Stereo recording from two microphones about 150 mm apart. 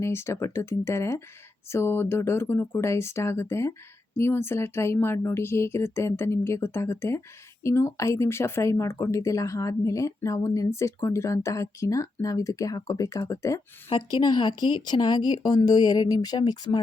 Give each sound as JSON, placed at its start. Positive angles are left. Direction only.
{"t": 0.0, "sound": "speech", "side_deg": 15}